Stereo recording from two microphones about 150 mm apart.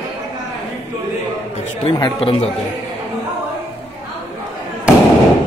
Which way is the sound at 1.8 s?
35° left (ahead or behind).